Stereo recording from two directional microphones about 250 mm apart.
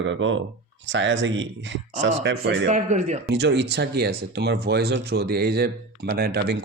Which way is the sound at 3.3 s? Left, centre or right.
Right.